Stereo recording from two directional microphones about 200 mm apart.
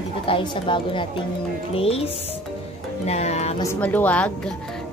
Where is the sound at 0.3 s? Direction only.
25° left (ahead or behind).